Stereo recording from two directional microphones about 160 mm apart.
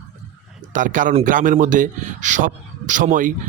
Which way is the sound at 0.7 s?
55° right (ahead or behind).